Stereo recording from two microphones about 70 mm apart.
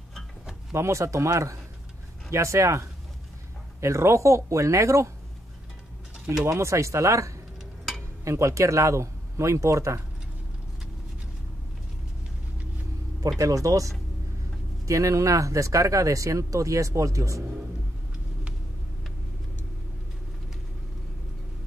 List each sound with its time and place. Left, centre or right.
0.7 s speech: right
6.4 s speech: right
13.4 s speech: right